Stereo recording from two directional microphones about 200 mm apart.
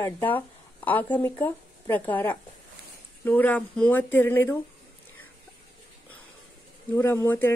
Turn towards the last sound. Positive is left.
turn(degrees=10)  # may be behind; listen again after turning